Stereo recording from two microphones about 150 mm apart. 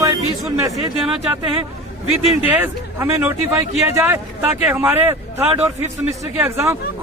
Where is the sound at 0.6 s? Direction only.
25° right (ahead or behind).